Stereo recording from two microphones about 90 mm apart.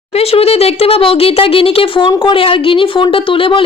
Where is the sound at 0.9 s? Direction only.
90° left.